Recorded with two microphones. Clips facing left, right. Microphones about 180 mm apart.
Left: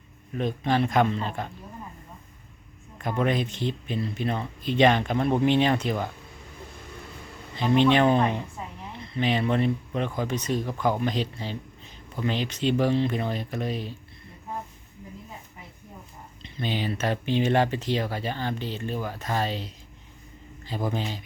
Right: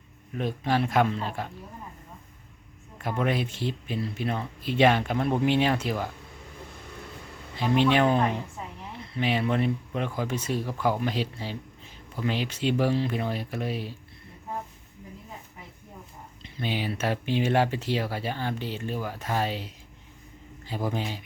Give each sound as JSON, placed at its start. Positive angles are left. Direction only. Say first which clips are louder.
{"t": 0.3, "sound": "speech", "louder": "left 2 dB", "side_deg": -5}
{"t": 3.0, "sound": "speech", "louder": "left 2 dB", "side_deg": -5}
{"t": 7.5, "sound": "speech", "louder": "left 2 dB", "side_deg": -5}
{"t": 16.4, "sound": "speech", "louder": "left 1 dB", "side_deg": -10}